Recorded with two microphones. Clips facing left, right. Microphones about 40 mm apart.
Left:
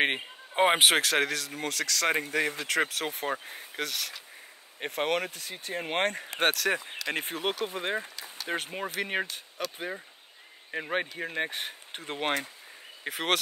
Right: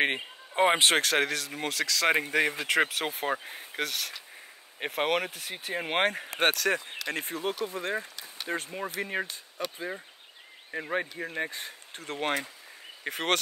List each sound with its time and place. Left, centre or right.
0.0 s a man's voice: centre
0.9 s speech: centre
5.3 s speech: right; by 6.7 s centre
7.2 s speech: left
7.8 s speech: left
9.0 s speech: left
10.7 s speech: left
11.5 s speech: left
12.0 s speech: left
13.0 s speech: centre